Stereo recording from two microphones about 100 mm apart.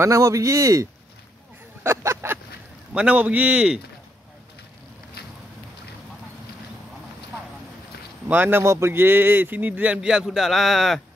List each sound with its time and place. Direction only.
0.0 s speech: 30° right (ahead or behind)
1.8 s a sound: 25° right (ahead or behind)
2.9 s speech: 10° right (ahead or behind)
8.3 s speech: 20° right (ahead or behind); by 11.0 s centre (ahead or behind)